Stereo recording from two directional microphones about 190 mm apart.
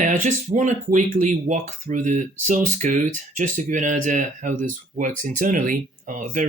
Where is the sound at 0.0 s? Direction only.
40° right (ahead or behind).